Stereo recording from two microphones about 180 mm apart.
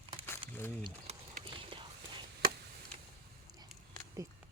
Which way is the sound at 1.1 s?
35° right (ahead or behind).